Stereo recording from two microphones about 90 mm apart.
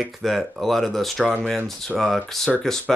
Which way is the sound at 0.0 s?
Centre (ahead or behind).